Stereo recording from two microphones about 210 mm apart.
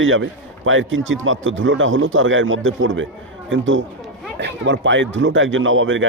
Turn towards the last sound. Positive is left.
turn(degrees=-65)  # may be behind; listen again after turning